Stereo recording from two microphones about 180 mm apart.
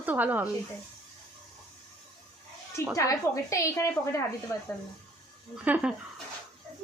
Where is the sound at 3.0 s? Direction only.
15° left (ahead or behind).